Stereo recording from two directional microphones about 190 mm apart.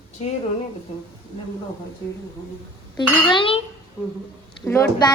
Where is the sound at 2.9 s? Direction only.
25° left (ahead or behind).